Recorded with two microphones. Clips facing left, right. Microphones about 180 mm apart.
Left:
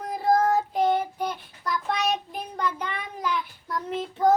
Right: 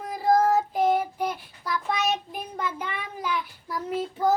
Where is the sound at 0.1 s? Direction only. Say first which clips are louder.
Right 1 dB; centre (ahead or behind).